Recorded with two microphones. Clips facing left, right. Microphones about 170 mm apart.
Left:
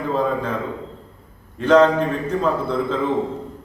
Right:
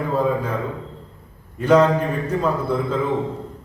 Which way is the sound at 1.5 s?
10° right (ahead or behind).